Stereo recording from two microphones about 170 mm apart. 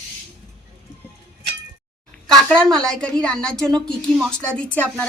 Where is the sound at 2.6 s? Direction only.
5° left (ahead or behind).